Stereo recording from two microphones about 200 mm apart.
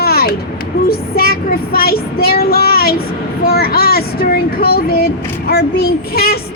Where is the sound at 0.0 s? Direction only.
50° left (ahead or behind).